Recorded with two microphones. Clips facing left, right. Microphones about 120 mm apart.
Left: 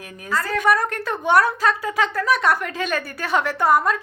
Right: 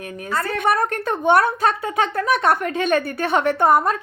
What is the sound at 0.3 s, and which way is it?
A woman's voice, 25° right (ahead or behind).